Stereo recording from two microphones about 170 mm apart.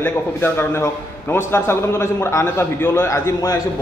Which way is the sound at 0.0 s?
15° left (ahead or behind).